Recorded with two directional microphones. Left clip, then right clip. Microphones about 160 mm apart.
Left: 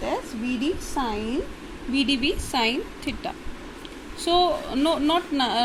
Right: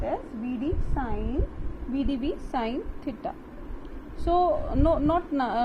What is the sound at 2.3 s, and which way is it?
A woman's voice, 15° left (ahead or behind).